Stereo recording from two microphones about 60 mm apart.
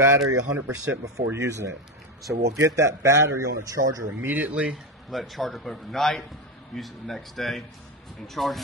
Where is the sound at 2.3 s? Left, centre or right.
Right.